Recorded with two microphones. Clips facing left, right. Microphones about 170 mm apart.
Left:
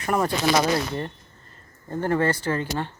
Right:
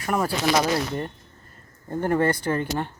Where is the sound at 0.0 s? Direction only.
Centre (ahead or behind).